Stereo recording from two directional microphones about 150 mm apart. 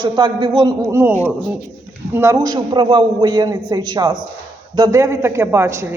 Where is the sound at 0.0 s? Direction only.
30° right (ahead or behind).